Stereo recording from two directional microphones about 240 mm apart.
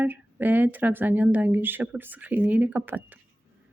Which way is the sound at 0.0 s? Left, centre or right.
Centre.